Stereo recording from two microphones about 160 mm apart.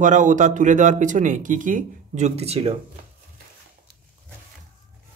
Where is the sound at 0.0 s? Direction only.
50° right (ahead or behind).